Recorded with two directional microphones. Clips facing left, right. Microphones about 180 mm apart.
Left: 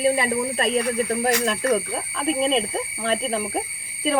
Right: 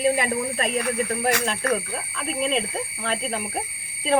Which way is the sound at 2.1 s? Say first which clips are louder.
Left 4 dB; 30° left (ahead or behind).